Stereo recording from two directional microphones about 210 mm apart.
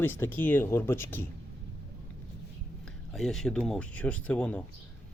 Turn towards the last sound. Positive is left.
turn(degrees=5)  # may be behind; listen again after turning